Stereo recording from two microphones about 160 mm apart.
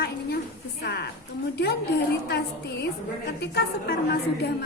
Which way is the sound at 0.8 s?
85° left.